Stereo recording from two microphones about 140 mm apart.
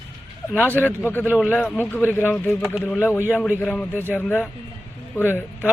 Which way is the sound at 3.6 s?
10° left (ahead or behind).